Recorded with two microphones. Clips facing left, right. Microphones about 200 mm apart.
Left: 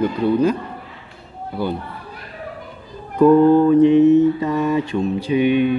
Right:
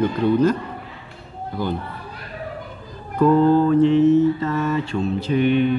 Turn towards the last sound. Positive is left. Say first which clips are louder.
# left 2 dB
turn(degrees=15)  # may be behind; listen again after turning